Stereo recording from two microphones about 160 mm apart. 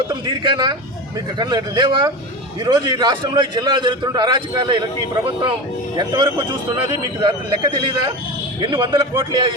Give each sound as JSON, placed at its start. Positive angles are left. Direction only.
{"t": 0.1, "sound": "a man's voice", "side_deg": -25}
{"t": 6.0, "sound": "a man's voice", "side_deg": -25}